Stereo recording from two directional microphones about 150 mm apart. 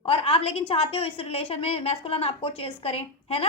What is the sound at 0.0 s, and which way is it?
A woman's voice, 40° left (ahead or behind).